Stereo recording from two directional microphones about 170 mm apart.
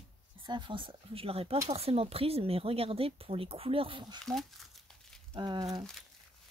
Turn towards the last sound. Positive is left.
turn(degrees=-25)  # may be behind; listen again after turning